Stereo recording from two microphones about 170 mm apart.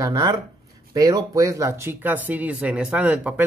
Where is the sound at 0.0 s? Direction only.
20° right (ahead or behind).